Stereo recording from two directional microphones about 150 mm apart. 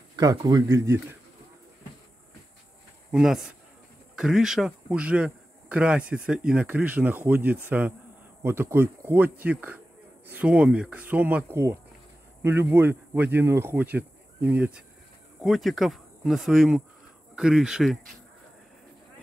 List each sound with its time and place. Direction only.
0.1 s speech: 25° right (ahead or behind)
3.1 s speech: 5° right (ahead or behind)